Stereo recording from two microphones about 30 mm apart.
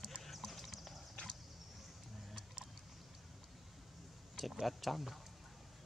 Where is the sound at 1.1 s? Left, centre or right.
Centre.